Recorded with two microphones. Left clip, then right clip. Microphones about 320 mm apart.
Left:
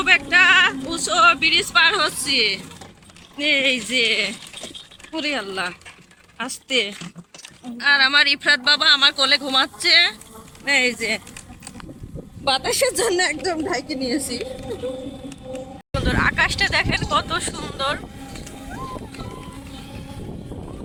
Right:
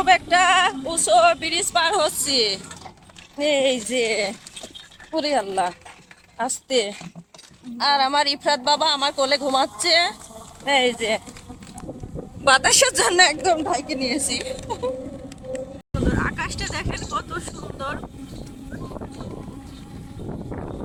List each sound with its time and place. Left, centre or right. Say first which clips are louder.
0.0 s speech: left 1 dB; right
12.5 s a woman's voice: right 4 dB; right
13.4 s speech: right 3 dB; right
15.9 s speech: left 5 dB; centre